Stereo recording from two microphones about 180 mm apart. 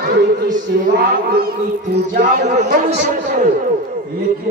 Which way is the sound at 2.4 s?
40° right (ahead or behind).